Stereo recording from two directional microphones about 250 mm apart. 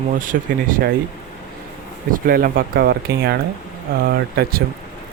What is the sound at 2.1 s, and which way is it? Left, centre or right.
Speech, right.